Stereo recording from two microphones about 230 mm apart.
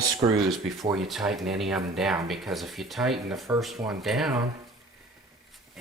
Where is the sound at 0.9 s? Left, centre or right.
Centre.